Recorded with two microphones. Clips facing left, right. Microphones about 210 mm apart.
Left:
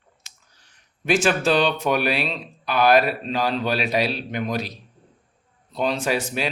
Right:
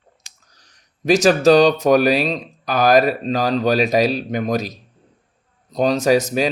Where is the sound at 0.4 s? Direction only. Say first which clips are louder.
Right 3 dB; 40° right (ahead or behind).